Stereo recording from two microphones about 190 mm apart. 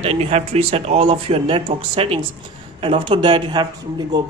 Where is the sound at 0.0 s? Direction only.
30° right (ahead or behind).